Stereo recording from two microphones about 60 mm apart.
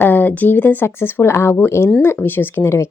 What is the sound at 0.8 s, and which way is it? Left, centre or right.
Speech, left.